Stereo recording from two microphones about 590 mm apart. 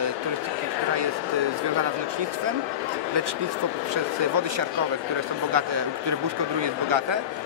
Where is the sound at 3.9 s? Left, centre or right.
Right.